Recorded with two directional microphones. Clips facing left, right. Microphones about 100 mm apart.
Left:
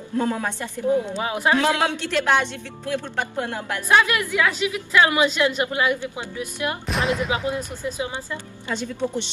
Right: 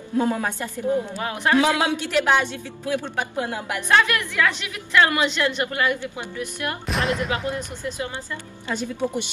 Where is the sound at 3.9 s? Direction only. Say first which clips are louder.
Left 1 dB; 15° left (ahead or behind).